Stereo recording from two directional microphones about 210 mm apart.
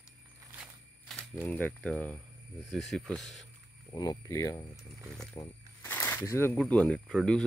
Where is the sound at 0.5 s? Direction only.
Centre (ahead or behind).